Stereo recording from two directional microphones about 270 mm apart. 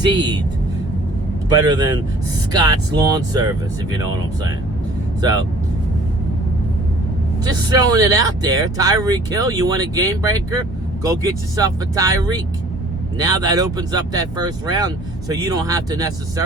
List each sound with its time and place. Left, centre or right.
0.0 s speech: centre
1.5 s speech: centre
7.4 s speech: centre